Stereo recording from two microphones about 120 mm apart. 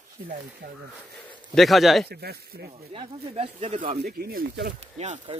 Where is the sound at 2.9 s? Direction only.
55° right (ahead or behind).